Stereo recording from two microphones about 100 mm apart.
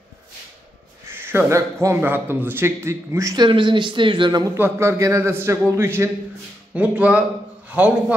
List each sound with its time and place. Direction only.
1.0 s a man's voice: 25° right (ahead or behind)
3.3 s speech: 50° right (ahead or behind)
4.6 s a man's voice: 25° right (ahead or behind)
6.7 s speech: 15° right (ahead or behind)